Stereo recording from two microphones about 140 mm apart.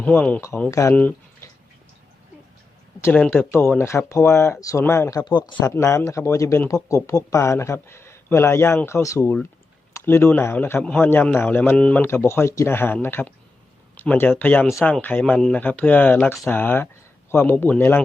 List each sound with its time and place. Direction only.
0.0 s a man's voice: 10° left (ahead or behind)
0.9 s a sound: 10° left (ahead or behind)
3.0 s speech: 10° left (ahead or behind)
5.2 s speech: 35° left (ahead or behind)
5.5 s a man's voice: 20° left (ahead or behind)